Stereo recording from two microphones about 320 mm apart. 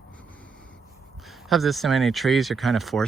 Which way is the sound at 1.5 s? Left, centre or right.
Centre.